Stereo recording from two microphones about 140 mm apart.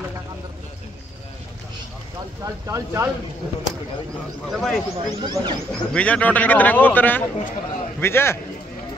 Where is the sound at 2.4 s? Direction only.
25° right (ahead or behind).